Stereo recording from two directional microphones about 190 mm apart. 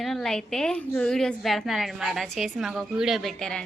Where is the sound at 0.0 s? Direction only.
Centre (ahead or behind).